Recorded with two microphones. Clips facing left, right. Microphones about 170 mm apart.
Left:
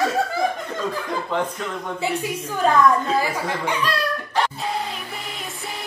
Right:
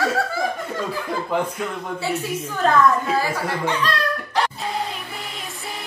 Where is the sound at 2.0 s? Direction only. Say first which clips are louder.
Even; 15° left (ahead or behind).